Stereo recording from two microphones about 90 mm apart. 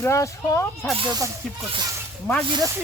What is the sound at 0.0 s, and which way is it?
Speech, 35° left (ahead or behind).